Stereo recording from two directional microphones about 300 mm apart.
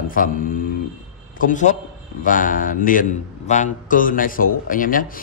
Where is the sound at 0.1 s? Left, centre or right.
Left.